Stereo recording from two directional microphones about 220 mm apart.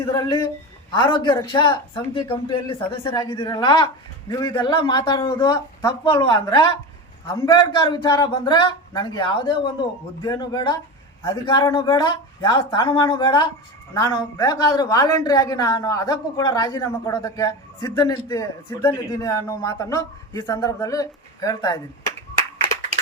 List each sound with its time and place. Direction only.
0.0 s a woman's voice: 20° left (ahead or behind)